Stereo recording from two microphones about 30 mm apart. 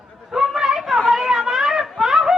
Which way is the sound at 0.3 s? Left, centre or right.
Centre.